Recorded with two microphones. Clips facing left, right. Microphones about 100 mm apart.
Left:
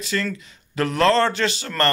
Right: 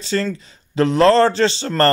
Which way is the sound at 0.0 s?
30° right (ahead or behind).